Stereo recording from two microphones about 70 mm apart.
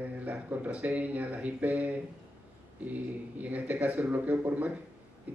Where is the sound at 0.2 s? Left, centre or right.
Right.